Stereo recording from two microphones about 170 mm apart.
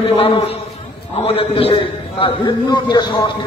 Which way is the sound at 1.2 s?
35° left (ahead or behind).